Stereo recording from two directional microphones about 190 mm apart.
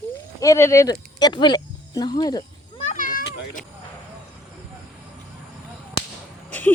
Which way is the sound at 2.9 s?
45° left (ahead or behind).